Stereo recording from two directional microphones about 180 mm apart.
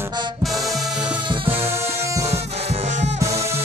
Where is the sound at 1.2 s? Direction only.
30° right (ahead or behind).